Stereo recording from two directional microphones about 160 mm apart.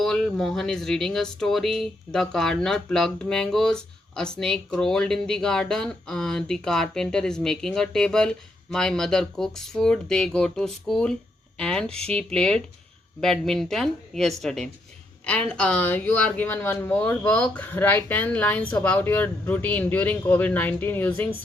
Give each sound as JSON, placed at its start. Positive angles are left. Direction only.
{"t": 0.0, "sound": "speech", "side_deg": 5}